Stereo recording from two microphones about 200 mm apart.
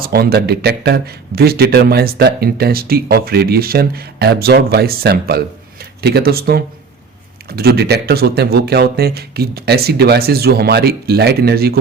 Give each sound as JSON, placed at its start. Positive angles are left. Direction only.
{"t": 0.0, "sound": "speech", "side_deg": -50}